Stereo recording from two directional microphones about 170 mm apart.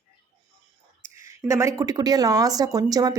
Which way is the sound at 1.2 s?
15° right (ahead or behind).